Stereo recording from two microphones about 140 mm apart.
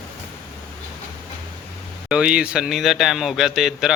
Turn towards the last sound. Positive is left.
turn(degrees=-5)  # may be behind; listen again after turning